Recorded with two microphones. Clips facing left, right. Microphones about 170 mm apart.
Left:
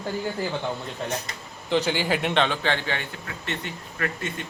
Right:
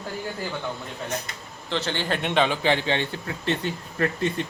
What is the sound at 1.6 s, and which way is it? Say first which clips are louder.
A man's voice: left 4 dB; 15° left (ahead or behind).